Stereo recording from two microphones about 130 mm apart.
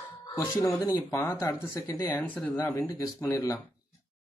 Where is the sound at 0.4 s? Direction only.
25° left (ahead or behind).